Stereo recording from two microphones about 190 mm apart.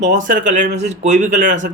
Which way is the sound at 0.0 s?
40° right (ahead or behind).